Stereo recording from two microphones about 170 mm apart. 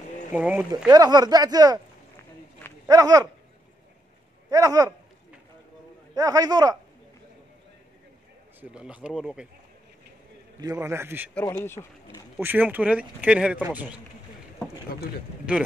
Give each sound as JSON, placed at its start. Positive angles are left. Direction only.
{"t": 0.3, "sound": "speech", "side_deg": -10}
{"t": 0.8, "sound": "speech", "side_deg": -25}
{"t": 2.9, "sound": "speech", "side_deg": -20}
{"t": 4.5, "sound": "speech", "side_deg": -20}
{"t": 6.1, "sound": "speech", "side_deg": -20}
{"t": 8.5, "sound": "speech", "side_deg": -5}
{"t": 10.6, "sound": "speech", "side_deg": -20}
{"t": 11.5, "sound": "speech", "side_deg": 15}
{"t": 12.4, "sound": "speech", "side_deg": -10}